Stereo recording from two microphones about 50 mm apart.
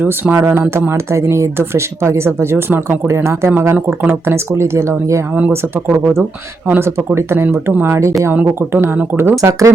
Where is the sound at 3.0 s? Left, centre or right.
Right.